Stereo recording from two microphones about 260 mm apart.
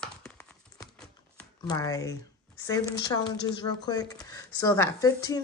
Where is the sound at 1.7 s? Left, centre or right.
Centre.